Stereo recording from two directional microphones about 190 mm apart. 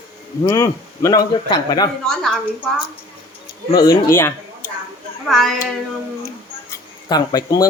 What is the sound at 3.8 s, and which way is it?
Speech, 15° left (ahead or behind).